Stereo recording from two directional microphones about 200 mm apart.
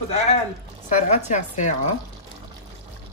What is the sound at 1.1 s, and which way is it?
Speech, 35° left (ahead or behind).